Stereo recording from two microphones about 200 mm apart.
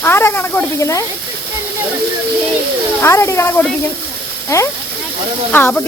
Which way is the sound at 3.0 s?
15° left (ahead or behind).